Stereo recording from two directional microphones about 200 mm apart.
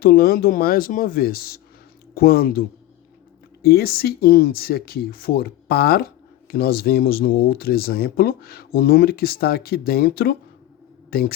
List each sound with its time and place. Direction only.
0.0 s speech: 50° left (ahead or behind)